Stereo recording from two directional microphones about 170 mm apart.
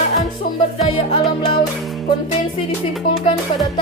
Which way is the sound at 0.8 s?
30° left (ahead or behind).